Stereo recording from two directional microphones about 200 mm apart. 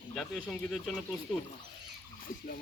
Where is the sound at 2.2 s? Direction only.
50° left (ahead or behind).